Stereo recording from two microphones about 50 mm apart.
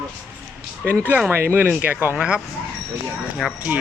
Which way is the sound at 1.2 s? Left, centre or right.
Right.